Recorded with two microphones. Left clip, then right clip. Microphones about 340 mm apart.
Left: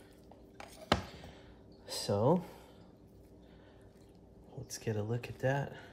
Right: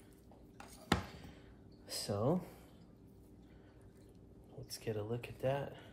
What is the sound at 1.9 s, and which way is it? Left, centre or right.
Speech, left.